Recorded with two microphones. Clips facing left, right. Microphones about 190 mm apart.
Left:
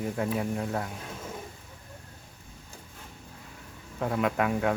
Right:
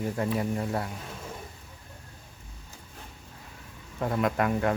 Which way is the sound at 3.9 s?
Centre (ahead or behind).